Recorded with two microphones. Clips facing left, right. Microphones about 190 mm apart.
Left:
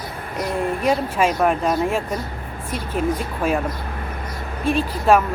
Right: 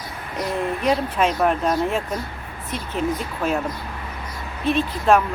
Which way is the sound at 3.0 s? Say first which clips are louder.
Left 2 dB; 50° left (ahead or behind).